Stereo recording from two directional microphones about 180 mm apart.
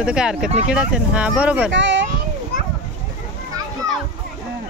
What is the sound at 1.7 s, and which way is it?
Speech, 90° right.